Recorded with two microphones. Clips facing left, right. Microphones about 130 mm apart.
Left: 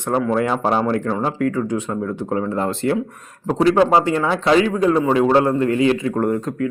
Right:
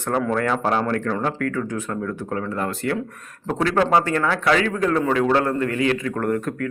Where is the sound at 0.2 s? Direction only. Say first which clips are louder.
Left 4 dB; 5° left (ahead or behind).